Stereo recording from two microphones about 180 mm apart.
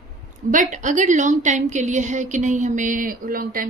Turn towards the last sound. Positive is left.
turn(degrees=-50)  # may be behind; listen again after turning